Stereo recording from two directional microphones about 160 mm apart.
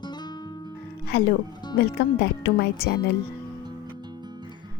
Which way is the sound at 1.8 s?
90° left.